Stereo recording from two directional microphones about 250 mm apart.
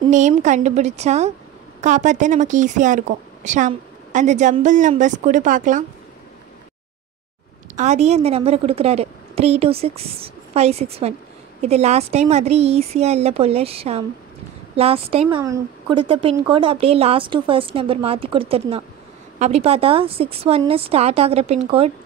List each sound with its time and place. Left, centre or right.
0.1 s a woman's voice: right
7.7 s a woman's voice: right